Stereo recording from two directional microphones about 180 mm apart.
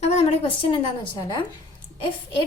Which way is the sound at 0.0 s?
35° left (ahead or behind).